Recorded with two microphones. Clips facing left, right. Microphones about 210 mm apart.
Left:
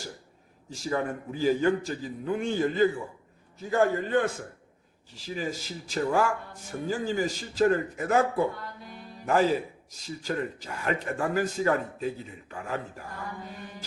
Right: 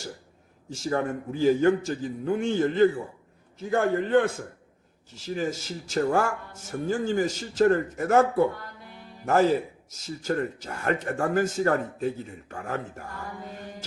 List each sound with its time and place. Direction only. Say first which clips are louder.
0.9 s a man's voice: right 2 dB; 50° right (ahead or behind)
5.3 s speech: right 4 dB; 45° right (ahead or behind)
10.2 s speech: right 4 dB; 50° right (ahead or behind)